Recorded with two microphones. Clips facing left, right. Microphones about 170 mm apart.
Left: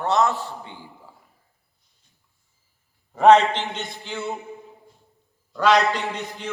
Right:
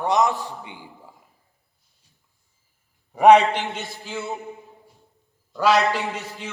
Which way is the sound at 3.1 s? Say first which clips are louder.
Right 1 dB; 15° right (ahead or behind).